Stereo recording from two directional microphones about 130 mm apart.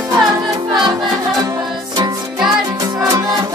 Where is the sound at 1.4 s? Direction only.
30° right (ahead or behind).